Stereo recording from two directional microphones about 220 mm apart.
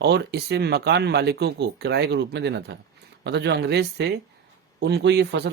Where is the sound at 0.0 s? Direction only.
50° right (ahead or behind).